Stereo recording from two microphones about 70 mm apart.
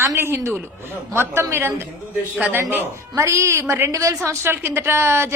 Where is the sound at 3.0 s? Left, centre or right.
Right.